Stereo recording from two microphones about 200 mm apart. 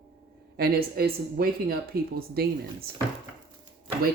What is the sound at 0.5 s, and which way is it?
A woman's voice, 50° right (ahead or behind).